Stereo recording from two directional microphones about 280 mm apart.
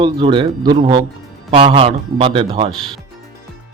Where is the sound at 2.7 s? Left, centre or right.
Centre.